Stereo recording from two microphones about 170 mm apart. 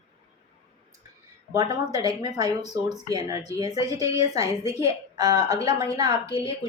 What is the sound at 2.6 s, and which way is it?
Speech, 40° left (ahead or behind).